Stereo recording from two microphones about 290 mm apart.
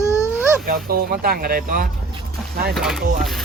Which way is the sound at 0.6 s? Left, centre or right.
Right.